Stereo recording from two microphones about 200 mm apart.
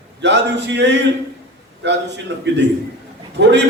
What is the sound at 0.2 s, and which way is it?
A man's voice, 60° right (ahead or behind).